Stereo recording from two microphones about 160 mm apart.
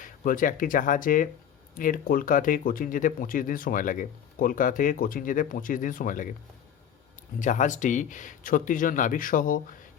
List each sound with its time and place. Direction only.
0.0 s speech: 60° left (ahead or behind)
7.3 s speech: 50° left (ahead or behind)